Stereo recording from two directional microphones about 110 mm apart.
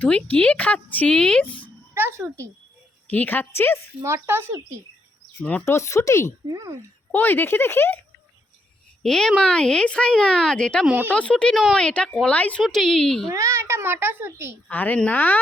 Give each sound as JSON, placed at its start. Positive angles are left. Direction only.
{"t": 0.0, "sound": "speech", "side_deg": 15}
{"t": 1.9, "sound": "a sound", "side_deg": -20}
{"t": 3.1, "sound": "speech", "side_deg": 15}
{"t": 4.0, "sound": "a child's voice", "side_deg": -20}
{"t": 5.4, "sound": "speech", "side_deg": 15}
{"t": 5.6, "sound": "speech", "side_deg": 25}
{"t": 6.5, "sound": "speech", "side_deg": -30}
{"t": 7.1, "sound": "speech", "side_deg": 20}
{"t": 9.0, "sound": "a woman's voice", "side_deg": 5}
{"t": 10.8, "sound": "speech", "side_deg": -15}
{"t": 11.1, "sound": "a woman's voice", "side_deg": 10}
{"t": 13.3, "sound": "a child's voice", "side_deg": -25}
{"t": 14.7, "sound": "speech", "side_deg": 15}